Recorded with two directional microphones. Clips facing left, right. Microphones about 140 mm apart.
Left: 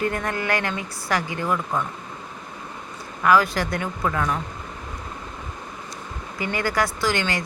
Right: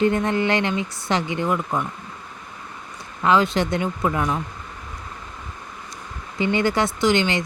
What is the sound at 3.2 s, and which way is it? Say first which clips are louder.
Speech: right 1 dB; 25° right (ahead or behind).